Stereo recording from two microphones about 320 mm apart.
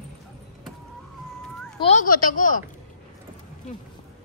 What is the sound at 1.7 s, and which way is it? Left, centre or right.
Speech, left.